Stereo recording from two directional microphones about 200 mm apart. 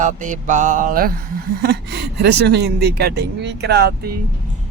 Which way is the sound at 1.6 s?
55° right (ahead or behind).